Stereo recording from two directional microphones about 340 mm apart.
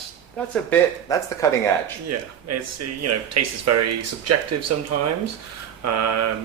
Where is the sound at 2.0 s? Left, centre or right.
Right.